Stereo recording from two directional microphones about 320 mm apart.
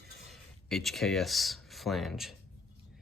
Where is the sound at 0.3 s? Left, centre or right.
Centre.